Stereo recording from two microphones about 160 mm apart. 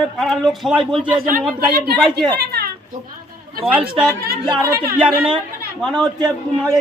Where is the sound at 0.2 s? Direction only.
Centre (ahead or behind).